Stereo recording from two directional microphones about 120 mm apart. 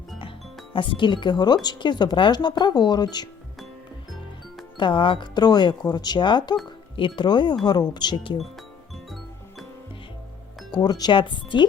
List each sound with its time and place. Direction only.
0.2 s music: 45° left (ahead or behind)
1.6 s speech: 40° left (ahead or behind)
4.8 s speech: 45° left (ahead or behind)
10.7 s speech: 35° left (ahead or behind)